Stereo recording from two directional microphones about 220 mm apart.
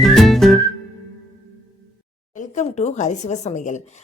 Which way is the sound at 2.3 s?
30° left (ahead or behind).